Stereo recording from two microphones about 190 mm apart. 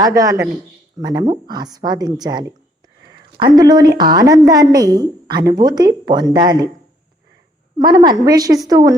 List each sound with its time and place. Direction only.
0.0 s a man's voice: 15° right (ahead or behind)
7.8 s a woman's voice: 20° right (ahead or behind)